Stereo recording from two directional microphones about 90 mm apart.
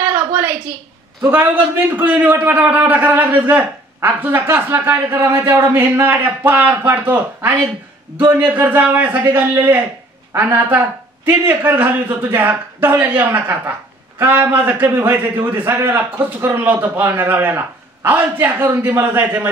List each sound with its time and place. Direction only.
1.3 s speech: 20° right (ahead or behind)